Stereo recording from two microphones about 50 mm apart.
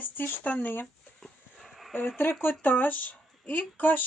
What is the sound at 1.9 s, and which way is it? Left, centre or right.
Speech, left.